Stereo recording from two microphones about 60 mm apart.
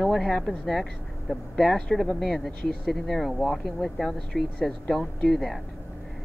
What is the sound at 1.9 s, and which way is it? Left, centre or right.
Speech, centre.